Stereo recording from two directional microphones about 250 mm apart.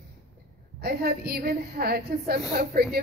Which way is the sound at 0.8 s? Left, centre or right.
Right.